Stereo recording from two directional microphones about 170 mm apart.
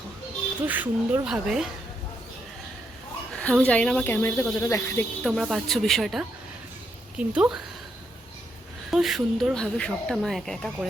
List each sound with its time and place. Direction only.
0.7 s speech: 10° right (ahead or behind)
3.3 s speech: 5° left (ahead or behind)
5.2 s speech: centre (ahead or behind)
8.9 s speech: centre (ahead or behind)